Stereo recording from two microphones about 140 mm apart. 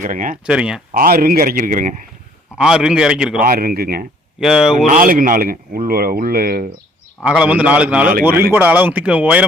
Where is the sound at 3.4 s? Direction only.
90° right.